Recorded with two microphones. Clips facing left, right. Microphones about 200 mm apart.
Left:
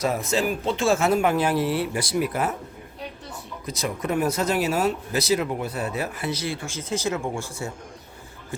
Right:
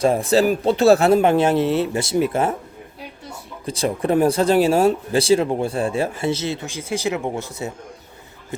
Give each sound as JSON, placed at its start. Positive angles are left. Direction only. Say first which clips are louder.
{"t": 0.0, "sound": "speech", "louder": "right 7 dB", "side_deg": -30}
{"t": 3.7, "sound": "speech", "louder": "right 7 dB", "side_deg": -30}